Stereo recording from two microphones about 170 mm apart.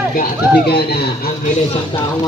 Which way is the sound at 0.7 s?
70° left (ahead or behind).